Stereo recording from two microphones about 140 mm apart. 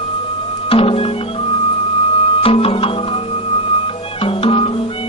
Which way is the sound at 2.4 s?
40° left (ahead or behind).